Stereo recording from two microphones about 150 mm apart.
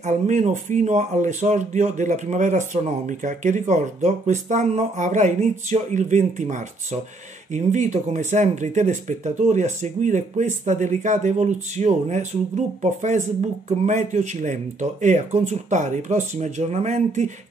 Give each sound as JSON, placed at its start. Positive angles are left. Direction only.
{"t": 0.0, "sound": "speech", "side_deg": -55}